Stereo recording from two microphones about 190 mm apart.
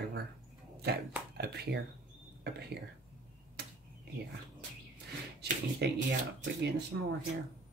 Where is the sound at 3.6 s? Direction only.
55° right (ahead or behind).